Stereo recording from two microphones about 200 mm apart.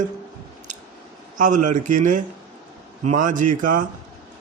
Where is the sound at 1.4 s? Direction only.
40° right (ahead or behind).